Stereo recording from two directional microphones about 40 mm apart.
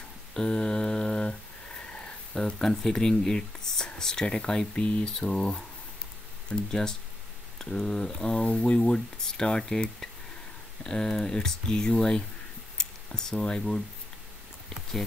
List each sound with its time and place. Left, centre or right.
0.3 s humming: centre
2.6 s speech: centre